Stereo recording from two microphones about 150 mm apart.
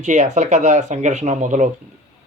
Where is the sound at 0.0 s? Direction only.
55° right (ahead or behind).